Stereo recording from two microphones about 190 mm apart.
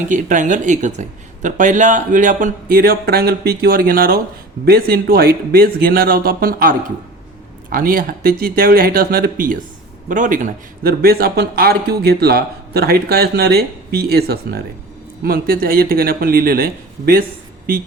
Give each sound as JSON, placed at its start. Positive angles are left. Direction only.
{"t": 0.1, "sound": "speech", "side_deg": -40}